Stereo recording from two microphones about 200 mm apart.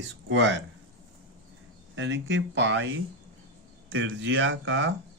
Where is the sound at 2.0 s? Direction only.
65° right (ahead or behind).